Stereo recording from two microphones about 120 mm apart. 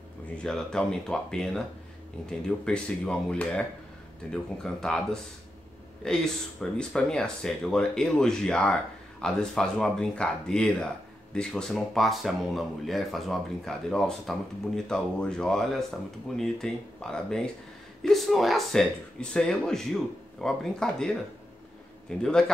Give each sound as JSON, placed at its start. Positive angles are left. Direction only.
{"t": 0.4, "sound": "speech", "side_deg": 5}
{"t": 2.6, "sound": "speech", "side_deg": 5}
{"t": 22.2, "sound": "speech", "side_deg": 5}